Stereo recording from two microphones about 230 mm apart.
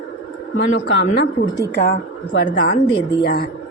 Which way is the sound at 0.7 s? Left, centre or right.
Left.